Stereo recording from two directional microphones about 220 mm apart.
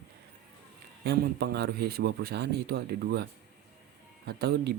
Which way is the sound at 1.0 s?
45° right (ahead or behind).